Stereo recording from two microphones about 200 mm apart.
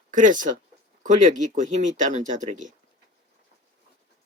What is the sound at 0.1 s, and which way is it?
Speech, 40° right (ahead or behind).